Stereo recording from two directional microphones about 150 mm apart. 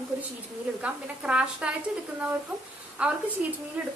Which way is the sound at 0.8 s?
5° right (ahead or behind).